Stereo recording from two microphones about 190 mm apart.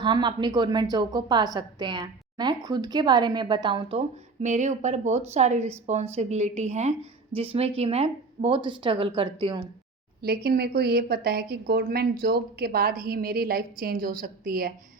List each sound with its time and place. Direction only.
0.0 s a woman's voice: 25° right (ahead or behind)
4.4 s a woman's voice: 40° right (ahead or behind)
10.2 s a woman's voice: 55° right (ahead or behind)